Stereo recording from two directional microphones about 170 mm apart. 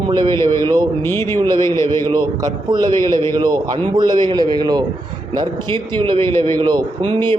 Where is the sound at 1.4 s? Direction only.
25° right (ahead or behind).